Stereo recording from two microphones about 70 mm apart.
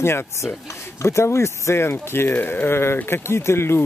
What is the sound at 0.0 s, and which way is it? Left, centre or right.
Speech, left.